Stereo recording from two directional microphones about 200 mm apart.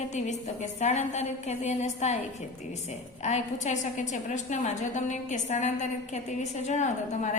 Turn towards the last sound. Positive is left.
turn(degrees=35)  # may be behind; listen again after turning